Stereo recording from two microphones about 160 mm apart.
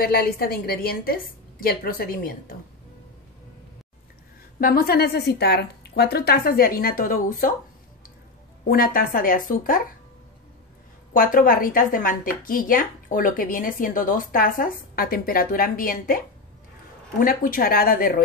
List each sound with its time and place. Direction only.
0.0 s a woman's voice: 70° left (ahead or behind)
4.6 s a woman's voice: 65° left (ahead or behind)
8.6 s speech: 65° left (ahead or behind)
11.1 s speech: 65° left (ahead or behind)
17.2 s speech: 65° left (ahead or behind)